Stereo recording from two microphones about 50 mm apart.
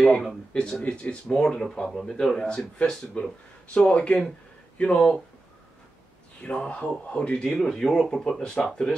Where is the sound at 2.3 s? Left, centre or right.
Centre.